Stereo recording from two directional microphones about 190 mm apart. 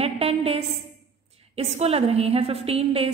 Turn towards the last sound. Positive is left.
turn(degrees=-30)  # may be behind; listen again after turning